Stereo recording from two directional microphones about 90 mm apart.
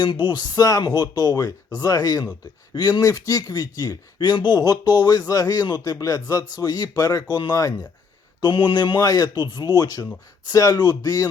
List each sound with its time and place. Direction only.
0.0 s speech: 60° left (ahead or behind); by 11.3 s 45° left (ahead or behind)